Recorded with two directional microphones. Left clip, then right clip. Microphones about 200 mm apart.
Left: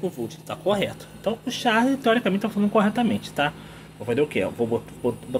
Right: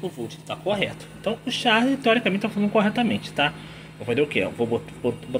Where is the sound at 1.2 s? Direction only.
5° left (ahead or behind).